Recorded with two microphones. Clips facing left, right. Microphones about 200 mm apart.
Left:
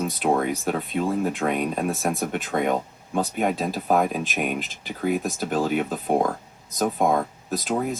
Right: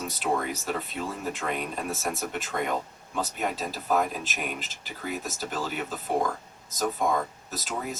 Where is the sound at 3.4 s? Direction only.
60° left (ahead or behind).